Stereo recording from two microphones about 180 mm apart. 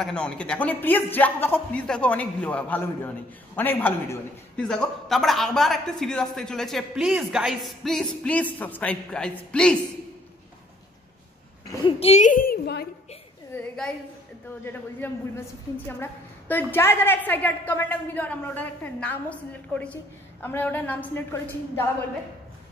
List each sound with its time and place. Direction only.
0.0 s a woman's voice: 5° left (ahead or behind)
11.8 s a woman's voice: 35° left (ahead or behind); by 12.8 s 60° left (ahead or behind)
13.6 s a sound: 5° left (ahead or behind)
14.6 s a woman's voice: 10° left (ahead or behind)